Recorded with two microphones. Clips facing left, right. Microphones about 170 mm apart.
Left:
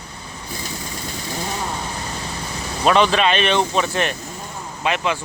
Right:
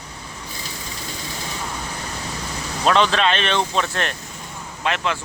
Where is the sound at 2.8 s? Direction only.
10° left (ahead or behind).